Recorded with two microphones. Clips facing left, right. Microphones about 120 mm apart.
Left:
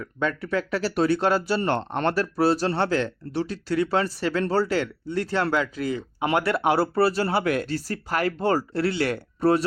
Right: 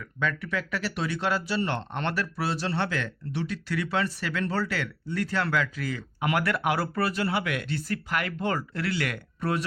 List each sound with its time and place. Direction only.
0.0 s speech: 35° left (ahead or behind)